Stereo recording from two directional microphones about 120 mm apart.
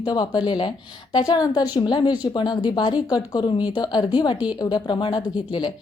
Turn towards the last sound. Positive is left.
turn(degrees=40)  # may be behind; listen again after turning